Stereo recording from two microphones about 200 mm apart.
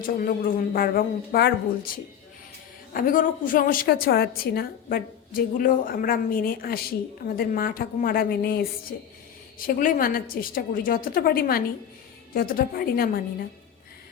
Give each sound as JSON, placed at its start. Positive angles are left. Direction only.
{"t": 0.0, "sound": "a woman's voice", "side_deg": 45}